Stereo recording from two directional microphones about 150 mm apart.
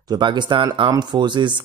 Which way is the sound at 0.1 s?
30° right (ahead or behind).